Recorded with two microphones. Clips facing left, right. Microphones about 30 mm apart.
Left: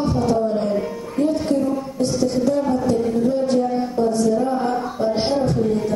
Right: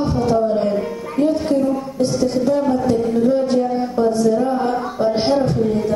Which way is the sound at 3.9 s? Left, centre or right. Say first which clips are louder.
Right 3 dB; centre.